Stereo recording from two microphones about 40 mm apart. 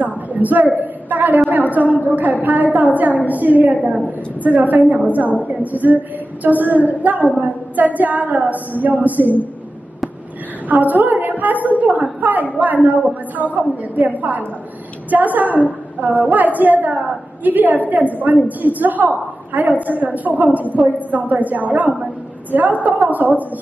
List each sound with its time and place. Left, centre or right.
0.0 s a sound: right
1.1 s a woman's voice: right
10.7 s a woman's voice: right
20.8 s a woman's voice: centre
21.1 s a woman's voice: right